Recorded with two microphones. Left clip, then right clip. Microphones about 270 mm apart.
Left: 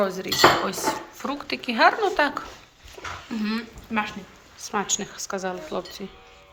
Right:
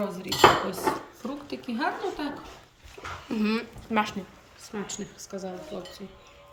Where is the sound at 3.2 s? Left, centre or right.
Right.